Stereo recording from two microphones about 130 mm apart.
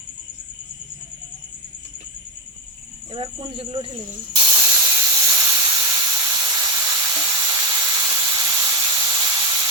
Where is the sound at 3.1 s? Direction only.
45° right (ahead or behind).